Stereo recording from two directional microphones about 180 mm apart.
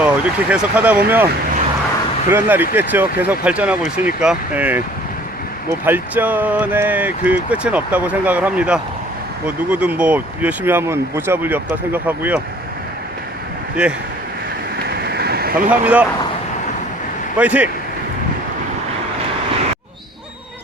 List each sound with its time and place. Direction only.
0.0 s speech: 10° right (ahead or behind)
2.3 s speech: 10° right (ahead or behind)
5.8 s speech: 10° right (ahead or behind)
13.8 s speech: 5° right (ahead or behind)
14.8 s a sound: 65° right (ahead or behind)
15.7 s speech: 10° right (ahead or behind)
17.3 s speech: 10° right (ahead or behind)